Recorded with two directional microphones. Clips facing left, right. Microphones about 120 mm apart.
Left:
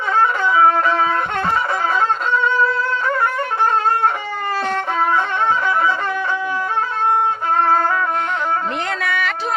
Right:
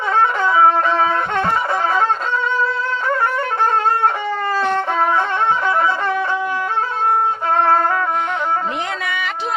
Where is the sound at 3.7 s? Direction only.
30° right (ahead or behind).